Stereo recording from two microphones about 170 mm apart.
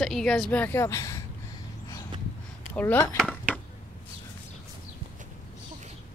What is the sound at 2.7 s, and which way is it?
Speech, 10° left (ahead or behind).